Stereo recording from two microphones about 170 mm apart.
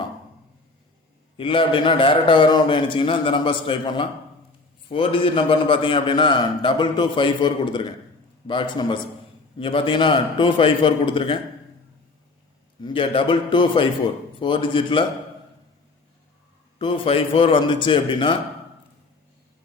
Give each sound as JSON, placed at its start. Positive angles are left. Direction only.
{"t": 1.4, "sound": "a man's voice", "side_deg": 30}
{"t": 12.8, "sound": "a man's voice", "side_deg": 30}
{"t": 16.7, "sound": "a man's voice", "side_deg": 30}